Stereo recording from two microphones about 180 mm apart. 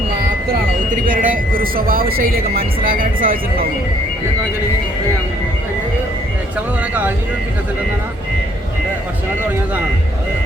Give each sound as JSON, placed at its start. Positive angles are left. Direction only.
{"t": 0.9, "sound": "speech", "side_deg": -50}